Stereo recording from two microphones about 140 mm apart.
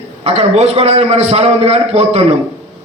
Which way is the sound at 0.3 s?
50° right (ahead or behind).